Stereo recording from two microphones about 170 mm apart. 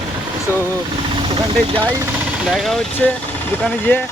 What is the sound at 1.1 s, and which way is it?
Speech, 30° right (ahead or behind).